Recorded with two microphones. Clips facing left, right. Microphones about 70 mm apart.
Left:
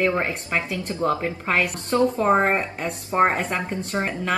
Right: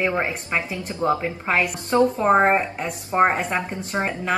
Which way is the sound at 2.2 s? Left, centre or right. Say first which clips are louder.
Right 2 dB; centre.